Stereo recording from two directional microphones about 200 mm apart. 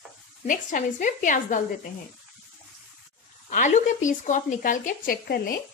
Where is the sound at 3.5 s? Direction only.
40° left (ahead or behind).